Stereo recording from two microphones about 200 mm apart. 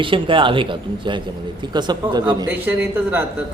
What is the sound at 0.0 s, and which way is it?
Speech, 25° right (ahead or behind).